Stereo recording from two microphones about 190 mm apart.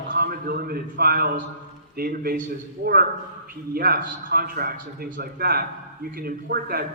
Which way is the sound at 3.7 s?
50° right (ahead or behind).